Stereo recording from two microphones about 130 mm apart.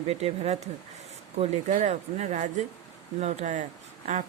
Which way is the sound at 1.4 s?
65° right (ahead or behind).